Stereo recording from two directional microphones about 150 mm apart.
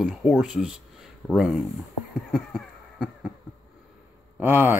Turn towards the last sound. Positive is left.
turn(degrees=-15)  # may be behind; listen again after turning